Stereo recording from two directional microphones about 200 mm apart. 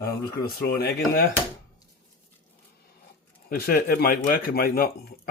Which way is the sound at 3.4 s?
50° left (ahead or behind).